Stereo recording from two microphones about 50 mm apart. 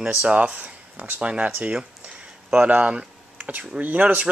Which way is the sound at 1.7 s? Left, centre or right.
Centre.